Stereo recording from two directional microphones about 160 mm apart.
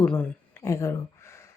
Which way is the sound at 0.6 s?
20° left (ahead or behind).